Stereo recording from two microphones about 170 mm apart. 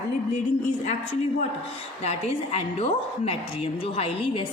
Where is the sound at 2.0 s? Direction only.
35° left (ahead or behind).